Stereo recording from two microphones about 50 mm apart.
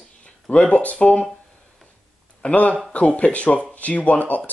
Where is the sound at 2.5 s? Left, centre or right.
Left.